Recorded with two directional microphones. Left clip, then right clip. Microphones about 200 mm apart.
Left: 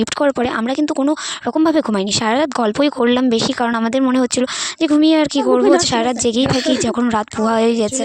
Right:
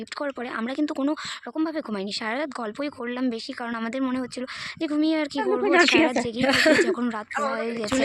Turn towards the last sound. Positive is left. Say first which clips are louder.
# left 11 dB
turn(degrees=55)  # may be behind; listen again after turning